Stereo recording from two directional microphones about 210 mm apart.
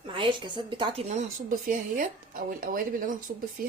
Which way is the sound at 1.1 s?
40° right (ahead or behind).